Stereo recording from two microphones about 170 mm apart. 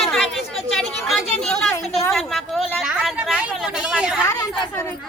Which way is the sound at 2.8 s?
5° right (ahead or behind).